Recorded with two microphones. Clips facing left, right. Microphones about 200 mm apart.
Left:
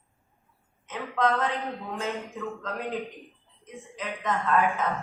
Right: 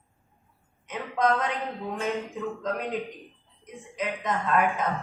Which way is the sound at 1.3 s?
15° right (ahead or behind).